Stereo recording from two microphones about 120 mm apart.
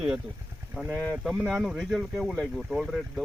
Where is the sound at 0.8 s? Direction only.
20° right (ahead or behind).